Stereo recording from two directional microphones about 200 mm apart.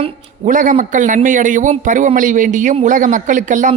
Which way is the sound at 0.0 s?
40° right (ahead or behind).